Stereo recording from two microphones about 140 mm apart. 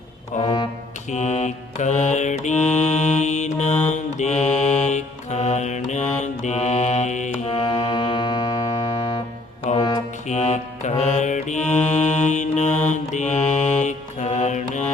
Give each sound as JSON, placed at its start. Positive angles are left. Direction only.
{"t": 0.4, "sound": "music", "side_deg": 35}
{"t": 1.1, "sound": "mantra", "side_deg": 55}
{"t": 7.6, "sound": "music", "side_deg": 30}
{"t": 9.7, "sound": "music", "side_deg": 60}
{"t": 10.2, "sound": "mantra", "side_deg": 55}